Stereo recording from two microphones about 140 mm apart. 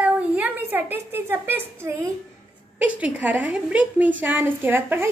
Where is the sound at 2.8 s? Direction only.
10° right (ahead or behind).